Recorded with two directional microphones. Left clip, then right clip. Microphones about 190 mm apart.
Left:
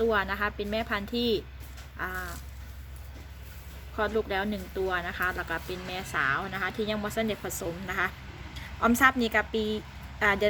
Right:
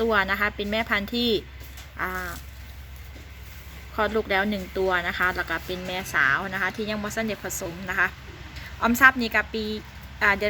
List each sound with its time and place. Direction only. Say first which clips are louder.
0.0 s speech: right 4 dB; 20° right (ahead or behind)
3.9 s a woman's voice: right 5 dB; 20° right (ahead or behind); by 10.4 s 10° left (ahead or behind)